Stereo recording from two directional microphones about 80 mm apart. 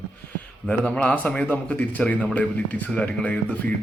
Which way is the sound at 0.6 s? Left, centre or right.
Centre.